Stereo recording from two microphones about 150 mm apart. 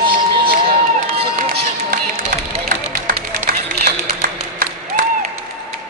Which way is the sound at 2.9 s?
60° right (ahead or behind).